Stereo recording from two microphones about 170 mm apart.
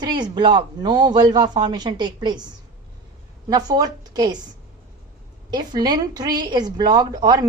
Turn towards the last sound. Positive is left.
turn(degrees=-25)  # may be behind; listen again after turning